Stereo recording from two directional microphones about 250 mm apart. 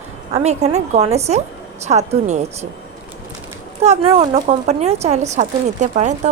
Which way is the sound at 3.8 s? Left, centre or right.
Right.